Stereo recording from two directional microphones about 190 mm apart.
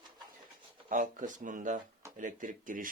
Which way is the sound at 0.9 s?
45° right (ahead or behind).